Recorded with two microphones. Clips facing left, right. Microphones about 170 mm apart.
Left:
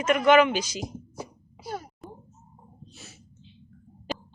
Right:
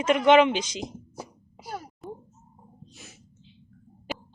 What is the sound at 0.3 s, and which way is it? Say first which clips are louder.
Speech: right 1 dB; 25° right (ahead or behind).